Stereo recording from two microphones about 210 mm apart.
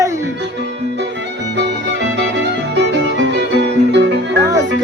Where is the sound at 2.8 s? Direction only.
55° right (ahead or behind).